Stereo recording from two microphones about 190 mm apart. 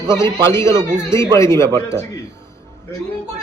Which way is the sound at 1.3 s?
15° left (ahead or behind).